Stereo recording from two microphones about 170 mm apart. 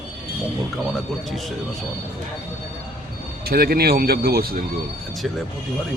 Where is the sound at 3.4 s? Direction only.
60° right (ahead or behind).